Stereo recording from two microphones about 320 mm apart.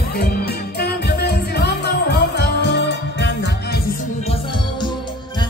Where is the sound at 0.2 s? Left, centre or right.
Left.